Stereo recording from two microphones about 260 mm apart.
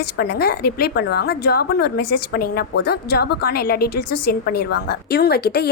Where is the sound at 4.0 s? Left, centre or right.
Left.